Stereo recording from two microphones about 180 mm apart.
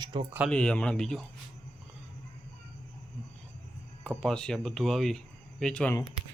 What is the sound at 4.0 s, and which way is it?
Speech, 5° left (ahead or behind).